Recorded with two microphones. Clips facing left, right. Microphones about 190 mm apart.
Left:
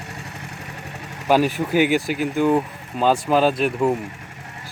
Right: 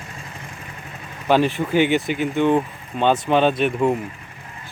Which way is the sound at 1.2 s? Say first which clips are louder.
Even; 10° left (ahead or behind).